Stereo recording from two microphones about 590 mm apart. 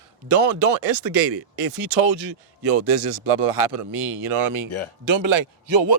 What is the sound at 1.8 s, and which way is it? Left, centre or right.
Speech, right.